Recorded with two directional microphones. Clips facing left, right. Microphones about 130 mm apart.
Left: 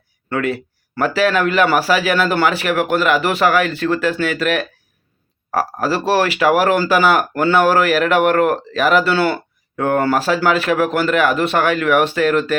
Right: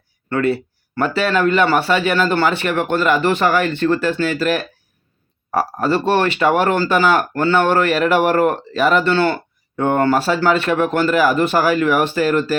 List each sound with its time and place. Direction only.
0.3 s speech: 5° left (ahead or behind)